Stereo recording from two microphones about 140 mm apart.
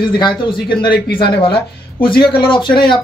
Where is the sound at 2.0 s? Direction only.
35° left (ahead or behind).